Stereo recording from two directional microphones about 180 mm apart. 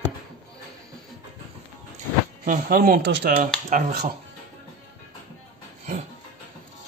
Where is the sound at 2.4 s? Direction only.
50° right (ahead or behind).